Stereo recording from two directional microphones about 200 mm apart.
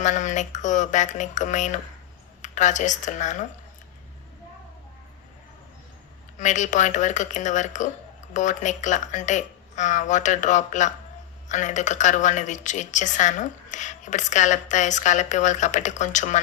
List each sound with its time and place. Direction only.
0.0 s a woman's voice: 35° left (ahead or behind)
6.4 s a woman's voice: 40° left (ahead or behind)